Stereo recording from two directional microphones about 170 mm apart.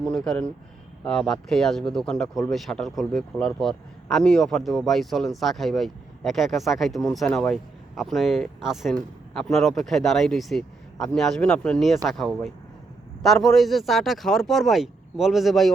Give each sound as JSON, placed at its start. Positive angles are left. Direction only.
{"t": 0.0, "sound": "a man's voice", "side_deg": 5}